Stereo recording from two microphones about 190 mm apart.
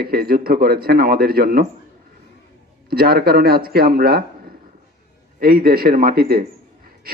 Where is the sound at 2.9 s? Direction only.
55° right (ahead or behind).